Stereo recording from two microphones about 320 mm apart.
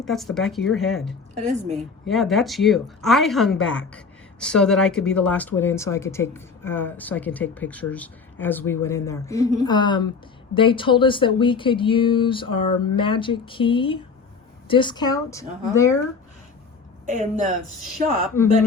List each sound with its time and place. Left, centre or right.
0.0 s a woman's voice: centre
1.4 s a woman's voice: right
2.0 s a woman's voice: centre
17.1 s a woman's voice: right